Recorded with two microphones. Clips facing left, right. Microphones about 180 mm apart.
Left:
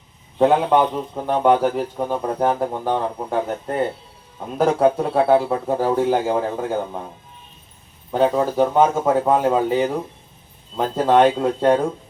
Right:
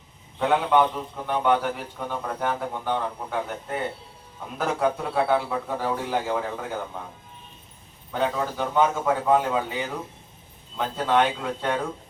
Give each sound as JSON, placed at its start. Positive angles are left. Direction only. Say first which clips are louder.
{"t": 0.3, "sound": "a man's voice", "louder": "left 5 dB", "side_deg": 40}
{"t": 8.1, "sound": "a man's voice", "louder": "left 8 dB", "side_deg": 40}